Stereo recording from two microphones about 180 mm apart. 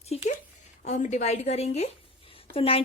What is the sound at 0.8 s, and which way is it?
A woman's voice, 40° left (ahead or behind).